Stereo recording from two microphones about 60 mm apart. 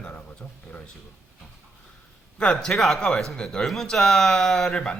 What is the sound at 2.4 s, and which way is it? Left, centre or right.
Speech, centre.